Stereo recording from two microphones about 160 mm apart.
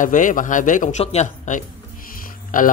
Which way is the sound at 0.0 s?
55° left (ahead or behind).